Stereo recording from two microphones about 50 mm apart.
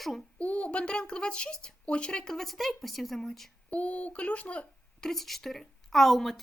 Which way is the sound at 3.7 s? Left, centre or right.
Left.